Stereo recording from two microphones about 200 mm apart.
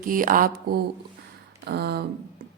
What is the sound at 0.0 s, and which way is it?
Speech, 45° right (ahead or behind).